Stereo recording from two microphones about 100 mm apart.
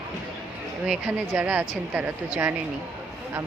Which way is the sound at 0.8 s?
10° right (ahead or behind).